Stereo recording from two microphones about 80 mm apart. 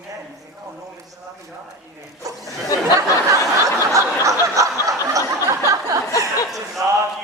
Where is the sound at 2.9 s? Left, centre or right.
Right.